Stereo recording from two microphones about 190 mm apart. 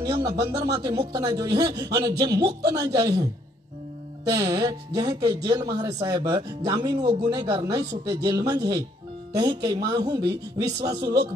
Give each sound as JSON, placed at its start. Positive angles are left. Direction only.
{"t": 0.0, "sound": "speech", "side_deg": -20}
{"t": 4.3, "sound": "speech", "side_deg": -20}